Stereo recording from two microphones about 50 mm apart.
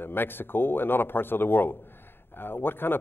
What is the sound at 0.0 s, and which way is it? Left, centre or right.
Speech, left.